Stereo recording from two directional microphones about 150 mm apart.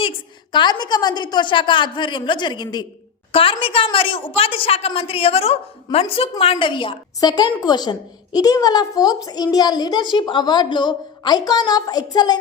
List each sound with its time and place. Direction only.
0.5 s a woman's voice: 30° left (ahead or behind)